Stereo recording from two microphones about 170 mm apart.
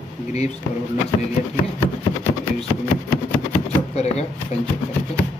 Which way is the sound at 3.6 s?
40° left (ahead or behind).